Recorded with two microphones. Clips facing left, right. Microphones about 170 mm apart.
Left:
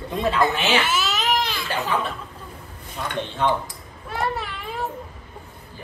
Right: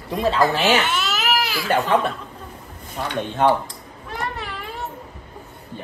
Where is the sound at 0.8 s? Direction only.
Centre (ahead or behind).